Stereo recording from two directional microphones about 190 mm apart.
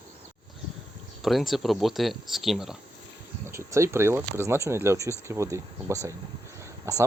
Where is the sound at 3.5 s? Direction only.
15° right (ahead or behind).